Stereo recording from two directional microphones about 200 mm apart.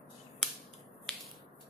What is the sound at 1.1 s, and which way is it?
Finger snapping, centre (ahead or behind).